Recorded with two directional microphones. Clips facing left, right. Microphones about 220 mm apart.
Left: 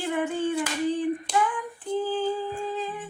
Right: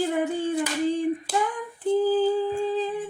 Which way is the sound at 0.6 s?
10° right (ahead or behind).